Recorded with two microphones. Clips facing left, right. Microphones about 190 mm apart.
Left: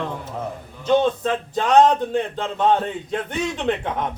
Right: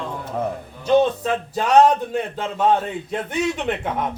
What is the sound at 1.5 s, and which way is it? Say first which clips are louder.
A man's voice: even; 10° right (ahead or behind).